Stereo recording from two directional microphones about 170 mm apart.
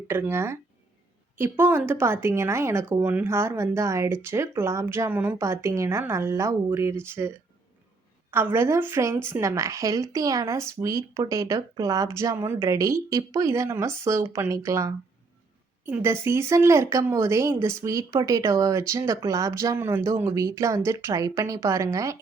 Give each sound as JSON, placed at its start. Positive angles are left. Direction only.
{"t": 0.1, "sound": "a woman's voice", "side_deg": -15}